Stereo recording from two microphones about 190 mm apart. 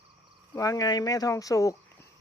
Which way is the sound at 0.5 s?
20° left (ahead or behind).